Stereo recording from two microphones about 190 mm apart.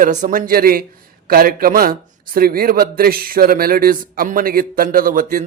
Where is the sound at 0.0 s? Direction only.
40° right (ahead or behind).